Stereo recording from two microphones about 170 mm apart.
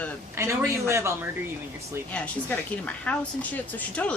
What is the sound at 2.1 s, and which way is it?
Speech, 10° left (ahead or behind).